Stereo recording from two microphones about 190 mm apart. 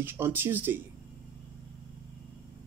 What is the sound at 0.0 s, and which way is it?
Speech, 10° right (ahead or behind).